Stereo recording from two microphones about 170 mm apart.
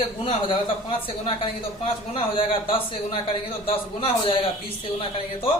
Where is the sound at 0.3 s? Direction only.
30° left (ahead or behind).